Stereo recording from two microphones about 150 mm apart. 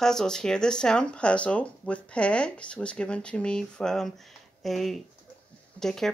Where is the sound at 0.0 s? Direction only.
5° left (ahead or behind).